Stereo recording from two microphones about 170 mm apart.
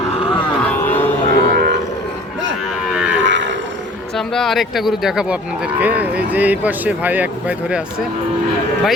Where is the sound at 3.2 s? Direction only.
90° right.